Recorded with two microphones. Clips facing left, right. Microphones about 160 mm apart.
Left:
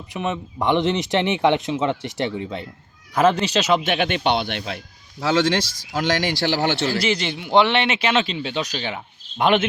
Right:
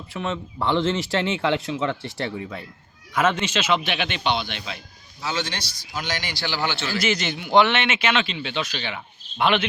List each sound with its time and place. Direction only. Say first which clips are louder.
0.1 s a man's voice: left 3 dB; 15° left (ahead or behind); by 4.8 s 55° left (ahead or behind)
5.2 s speech: left 10 dB; 90° left
6.7 s a man's voice: left 3 dB; 35° left (ahead or behind)